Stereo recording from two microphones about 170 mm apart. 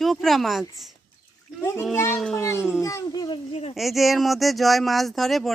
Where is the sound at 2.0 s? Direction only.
15° left (ahead or behind).